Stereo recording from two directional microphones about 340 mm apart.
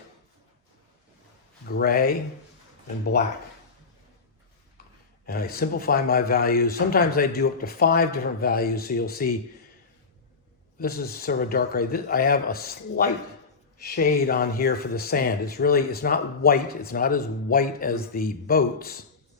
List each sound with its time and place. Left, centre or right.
1.6 s speech: left
5.2 s speech: left
10.8 s speech: left